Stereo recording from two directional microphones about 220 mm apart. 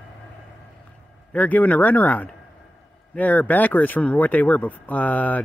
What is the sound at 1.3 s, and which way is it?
Speech, 5° left (ahead or behind).